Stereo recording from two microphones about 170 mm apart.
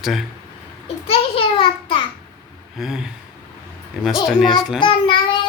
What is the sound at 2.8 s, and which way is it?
Speech, 5° right (ahead or behind).